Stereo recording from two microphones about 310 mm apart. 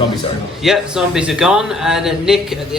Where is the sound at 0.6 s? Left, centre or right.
Centre.